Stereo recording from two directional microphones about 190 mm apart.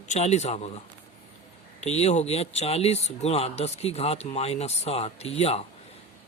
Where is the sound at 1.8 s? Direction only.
35° left (ahead or behind).